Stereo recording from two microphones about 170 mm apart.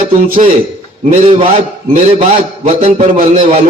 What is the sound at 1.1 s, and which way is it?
Speech, 35° right (ahead or behind).